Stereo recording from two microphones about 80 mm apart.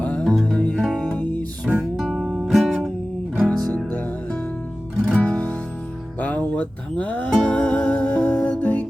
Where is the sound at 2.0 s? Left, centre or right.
Centre.